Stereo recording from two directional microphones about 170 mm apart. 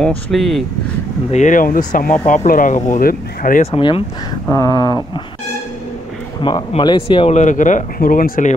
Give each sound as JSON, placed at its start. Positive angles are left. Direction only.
{"t": 0.3, "sound": "speech", "side_deg": 0}
{"t": 1.3, "sound": "speech", "side_deg": 50}
{"t": 3.7, "sound": "speech", "side_deg": 30}
{"t": 4.5, "sound": "a sound", "side_deg": 20}
{"t": 6.4, "sound": "speech", "side_deg": 25}